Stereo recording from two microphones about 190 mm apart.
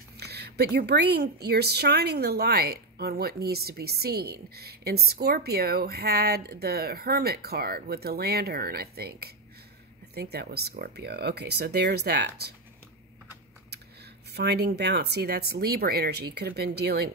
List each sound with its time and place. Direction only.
0.2 s a woman's voice: 60° right (ahead or behind)
14.3 s a woman's voice: 60° right (ahead or behind)